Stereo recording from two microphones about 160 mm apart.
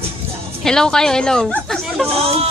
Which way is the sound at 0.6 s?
5° left (ahead or behind).